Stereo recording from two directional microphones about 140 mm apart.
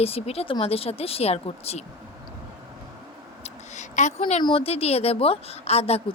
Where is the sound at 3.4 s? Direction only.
60° left (ahead or behind).